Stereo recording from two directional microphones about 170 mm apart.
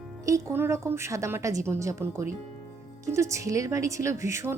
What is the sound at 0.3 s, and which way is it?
Speech, 15° right (ahead or behind).